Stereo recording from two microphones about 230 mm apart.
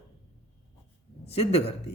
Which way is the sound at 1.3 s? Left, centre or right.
Left.